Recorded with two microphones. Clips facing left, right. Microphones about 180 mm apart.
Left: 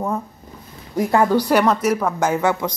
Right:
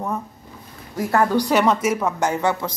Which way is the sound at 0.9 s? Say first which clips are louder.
Left 3 dB; 15° left (ahead or behind).